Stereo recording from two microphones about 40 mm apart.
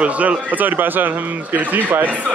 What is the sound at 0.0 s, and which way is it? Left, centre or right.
Speech, right.